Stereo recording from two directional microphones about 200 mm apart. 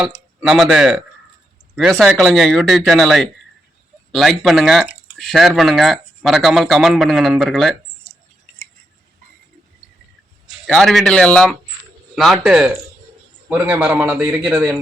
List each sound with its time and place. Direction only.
0.4 s speech: centre (ahead or behind)
10.5 s a man's voice: centre (ahead or behind)